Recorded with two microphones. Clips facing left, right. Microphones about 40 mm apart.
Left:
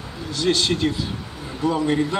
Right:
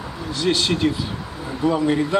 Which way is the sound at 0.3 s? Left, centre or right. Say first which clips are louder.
Even; centre.